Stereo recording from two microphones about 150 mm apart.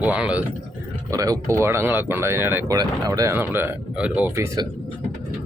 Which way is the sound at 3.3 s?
15° right (ahead or behind).